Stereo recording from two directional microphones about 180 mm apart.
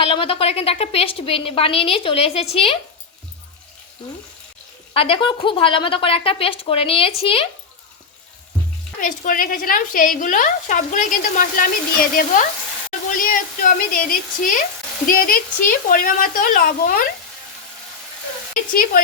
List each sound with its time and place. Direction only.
0.0 s a woman's voice: 30° left (ahead or behind)
4.9 s a woman's voice: 30° left (ahead or behind)
9.0 s speech: 50° left (ahead or behind)